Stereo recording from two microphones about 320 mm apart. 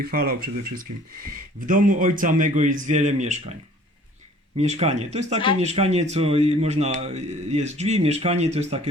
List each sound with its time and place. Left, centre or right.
0.0 s a man's voice: right
1.6 s a man's voice: right
4.5 s a man's voice: right